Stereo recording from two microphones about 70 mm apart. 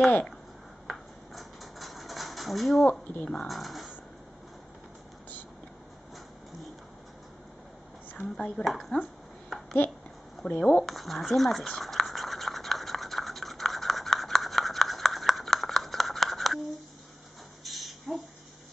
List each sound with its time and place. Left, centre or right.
0.8 s a sound: centre
2.9 s speech: centre
3.3 s speech: centre
8.1 s a woman's voice: centre
8.6 s speech: centre
9.5 s babbling: centre
10.4 s speech: centre
10.9 s toothbrush: centre
17.6 s a sound: centre